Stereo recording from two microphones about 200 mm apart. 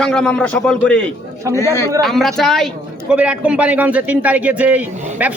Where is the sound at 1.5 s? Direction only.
15° left (ahead or behind).